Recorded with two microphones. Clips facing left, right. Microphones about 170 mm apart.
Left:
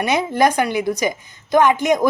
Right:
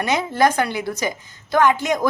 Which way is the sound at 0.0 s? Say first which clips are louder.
Left 2 dB; 15° left (ahead or behind).